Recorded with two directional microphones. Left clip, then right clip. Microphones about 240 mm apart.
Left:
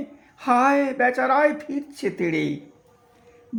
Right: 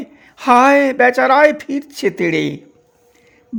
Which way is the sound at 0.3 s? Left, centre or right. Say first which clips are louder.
Right 9 dB; right.